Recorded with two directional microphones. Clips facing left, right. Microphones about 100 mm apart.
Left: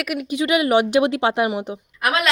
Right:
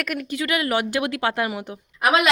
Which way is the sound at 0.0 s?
10° left (ahead or behind).